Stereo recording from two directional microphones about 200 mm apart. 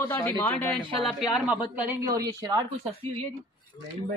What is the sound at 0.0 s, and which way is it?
Speech, 10° left (ahead or behind).